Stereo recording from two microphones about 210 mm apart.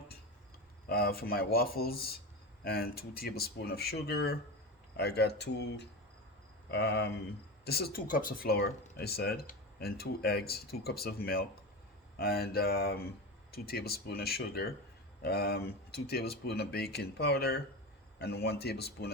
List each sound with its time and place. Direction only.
0.9 s speech: 45° left (ahead or behind)